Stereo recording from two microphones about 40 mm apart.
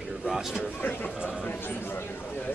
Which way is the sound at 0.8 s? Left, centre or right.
Left.